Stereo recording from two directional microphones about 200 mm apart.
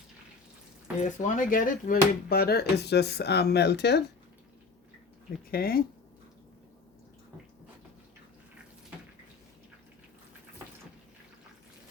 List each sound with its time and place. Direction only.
0.9 s speech: 40° left (ahead or behind); by 4.0 s 55° left (ahead or behind)
5.5 s speech: 50° left (ahead or behind)